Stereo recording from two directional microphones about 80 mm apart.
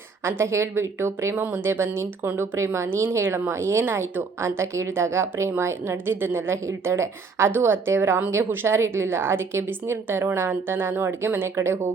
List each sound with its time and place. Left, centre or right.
0.3 s speech: right